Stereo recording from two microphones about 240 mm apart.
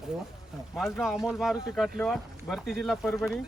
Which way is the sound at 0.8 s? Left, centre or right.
Centre.